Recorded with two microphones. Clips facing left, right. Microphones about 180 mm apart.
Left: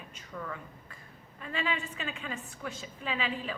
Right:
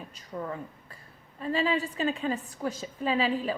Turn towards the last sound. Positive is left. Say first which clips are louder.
# right 8 dB
turn(degrees=-35)  # may be behind; listen again after turning